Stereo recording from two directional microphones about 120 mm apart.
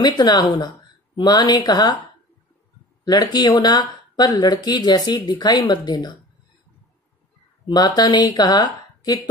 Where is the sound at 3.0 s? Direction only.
35° left (ahead or behind).